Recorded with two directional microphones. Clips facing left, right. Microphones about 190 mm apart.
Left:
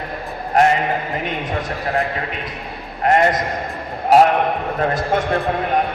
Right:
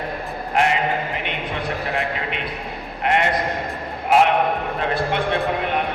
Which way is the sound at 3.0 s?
40° left (ahead or behind).